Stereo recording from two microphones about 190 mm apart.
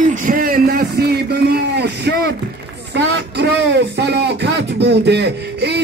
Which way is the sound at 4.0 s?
60° right (ahead or behind).